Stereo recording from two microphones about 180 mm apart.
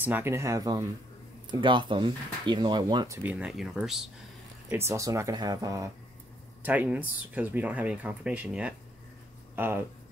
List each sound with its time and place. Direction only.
0.0 s speech: 10° right (ahead or behind)
3.3 s speech: 5° right (ahead or behind)
4.6 s speech: 15° right (ahead or behind)
6.6 s speech: 10° right (ahead or behind)